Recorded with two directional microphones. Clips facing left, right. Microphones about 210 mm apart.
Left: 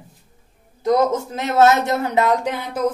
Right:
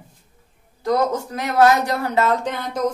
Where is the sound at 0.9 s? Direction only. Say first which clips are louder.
Left 3 dB; 20° left (ahead or behind).